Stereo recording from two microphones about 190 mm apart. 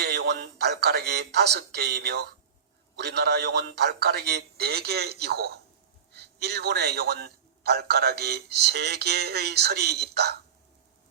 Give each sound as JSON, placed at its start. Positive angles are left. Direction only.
{"t": 0.0, "sound": "a man's voice", "side_deg": -60}